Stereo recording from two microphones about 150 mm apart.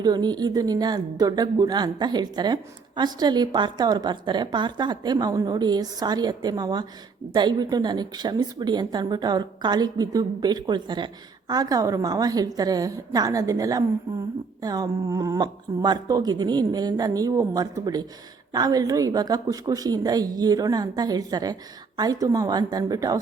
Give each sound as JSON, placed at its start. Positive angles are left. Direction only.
{"t": 0.0, "sound": "a woman's voice", "side_deg": -25}